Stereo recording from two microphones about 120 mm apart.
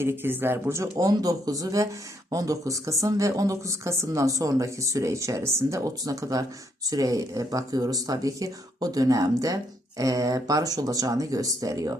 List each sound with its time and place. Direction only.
0.0 s speech: 20° right (ahead or behind)